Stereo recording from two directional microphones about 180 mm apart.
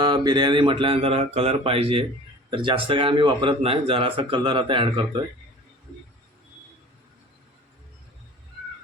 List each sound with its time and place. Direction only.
0.0 s speech: 25° right (ahead or behind)